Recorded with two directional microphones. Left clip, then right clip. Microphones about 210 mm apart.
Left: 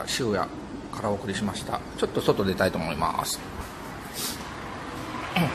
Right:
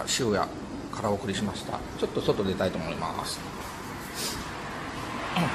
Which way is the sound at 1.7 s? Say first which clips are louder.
Left 3 dB; 15° left (ahead or behind).